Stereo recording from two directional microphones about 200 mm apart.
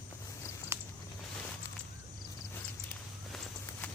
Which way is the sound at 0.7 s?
10° right (ahead or behind).